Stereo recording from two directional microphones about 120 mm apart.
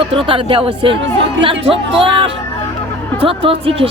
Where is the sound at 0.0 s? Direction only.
45° right (ahead or behind).